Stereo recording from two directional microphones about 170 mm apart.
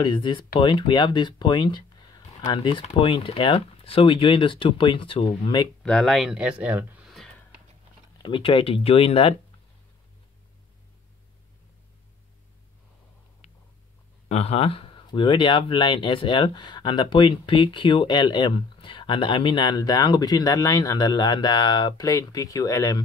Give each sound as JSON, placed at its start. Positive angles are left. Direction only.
{"t": 0.0, "sound": "speech", "side_deg": 30}
{"t": 5.8, "sound": "speech", "side_deg": 5}
{"t": 8.2, "sound": "speech", "side_deg": 30}
{"t": 13.4, "sound": "a sound", "side_deg": 40}
{"t": 14.3, "sound": "speech", "side_deg": 35}